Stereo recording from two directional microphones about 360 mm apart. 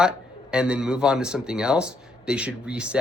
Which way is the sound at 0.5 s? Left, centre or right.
Centre.